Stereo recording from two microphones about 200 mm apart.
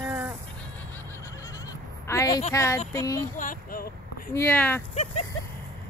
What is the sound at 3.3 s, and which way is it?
Speech, 45° left (ahead or behind).